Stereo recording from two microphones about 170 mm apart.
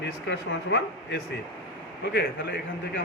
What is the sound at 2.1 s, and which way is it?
Speech, 90° left.